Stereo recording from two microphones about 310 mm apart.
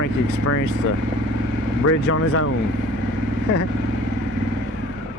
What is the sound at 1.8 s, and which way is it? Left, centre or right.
Speech, left.